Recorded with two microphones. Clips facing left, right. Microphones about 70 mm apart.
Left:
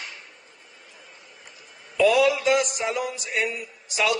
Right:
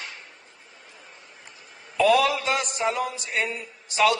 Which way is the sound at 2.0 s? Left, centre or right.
Right.